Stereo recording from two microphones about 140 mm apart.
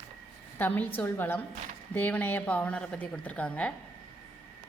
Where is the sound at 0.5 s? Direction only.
15° left (ahead or behind).